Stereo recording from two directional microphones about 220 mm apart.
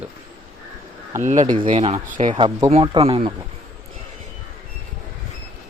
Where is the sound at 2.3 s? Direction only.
25° right (ahead or behind).